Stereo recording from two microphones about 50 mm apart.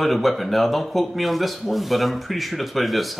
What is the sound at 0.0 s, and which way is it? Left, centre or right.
Speech, centre.